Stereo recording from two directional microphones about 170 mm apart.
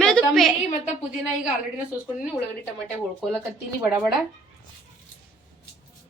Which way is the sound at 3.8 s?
10° right (ahead or behind).